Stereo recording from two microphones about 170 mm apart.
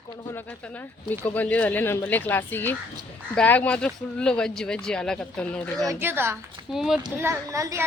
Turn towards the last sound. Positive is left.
turn(degrees=-20)  # may be behind; listen again after turning